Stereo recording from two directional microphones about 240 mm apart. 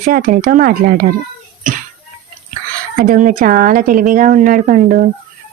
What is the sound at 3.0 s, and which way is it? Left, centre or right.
Speech, right.